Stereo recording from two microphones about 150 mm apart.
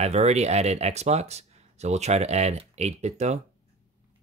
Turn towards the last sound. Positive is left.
turn(degrees=-50)  # may be behind; listen again after turning